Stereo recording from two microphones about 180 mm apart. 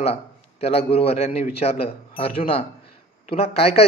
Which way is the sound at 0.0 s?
35° left (ahead or behind).